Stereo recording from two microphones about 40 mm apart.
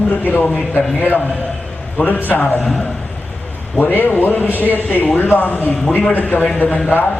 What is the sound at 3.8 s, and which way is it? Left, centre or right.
Speech, left.